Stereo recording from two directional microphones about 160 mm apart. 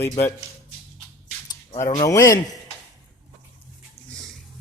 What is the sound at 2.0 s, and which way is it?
Speech, 20° left (ahead or behind).